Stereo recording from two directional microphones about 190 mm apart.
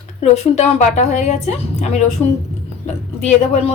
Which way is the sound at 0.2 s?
35° left (ahead or behind).